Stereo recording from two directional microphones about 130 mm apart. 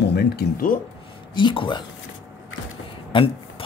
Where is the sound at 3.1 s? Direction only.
45° left (ahead or behind).